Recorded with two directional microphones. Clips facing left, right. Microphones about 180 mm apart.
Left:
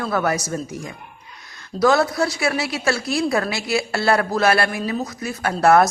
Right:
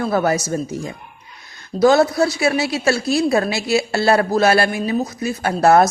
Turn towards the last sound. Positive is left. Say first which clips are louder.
# right 2 dB
turn(degrees=-25)  # may be behind; listen again after turning